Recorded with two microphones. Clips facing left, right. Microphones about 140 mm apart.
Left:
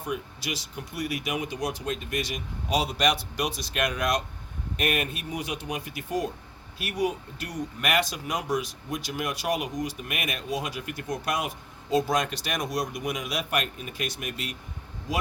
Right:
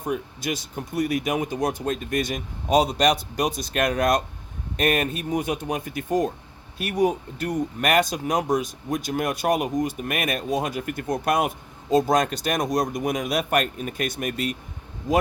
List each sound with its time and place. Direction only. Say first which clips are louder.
0.0 s speech: right 5 dB; 50° right (ahead or behind)